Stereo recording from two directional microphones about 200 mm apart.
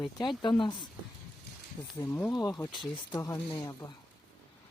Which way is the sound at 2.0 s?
15° left (ahead or behind).